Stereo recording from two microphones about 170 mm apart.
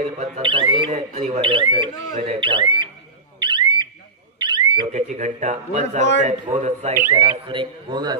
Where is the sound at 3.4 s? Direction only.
25° right (ahead or behind).